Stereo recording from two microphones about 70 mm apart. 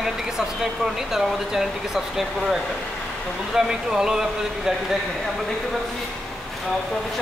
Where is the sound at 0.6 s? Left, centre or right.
Centre.